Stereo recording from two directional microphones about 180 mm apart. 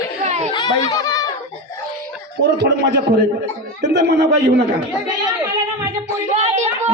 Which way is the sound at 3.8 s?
70° right (ahead or behind).